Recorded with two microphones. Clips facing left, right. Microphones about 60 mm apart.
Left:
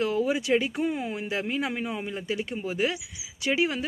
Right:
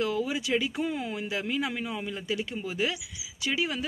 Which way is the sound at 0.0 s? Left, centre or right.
Left.